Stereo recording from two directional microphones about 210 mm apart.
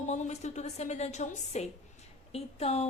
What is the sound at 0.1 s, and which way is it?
A woman's voice, 35° left (ahead or behind).